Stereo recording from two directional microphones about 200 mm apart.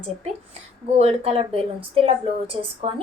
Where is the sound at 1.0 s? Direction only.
30° right (ahead or behind).